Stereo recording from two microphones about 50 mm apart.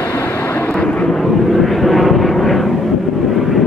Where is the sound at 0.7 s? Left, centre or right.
Left.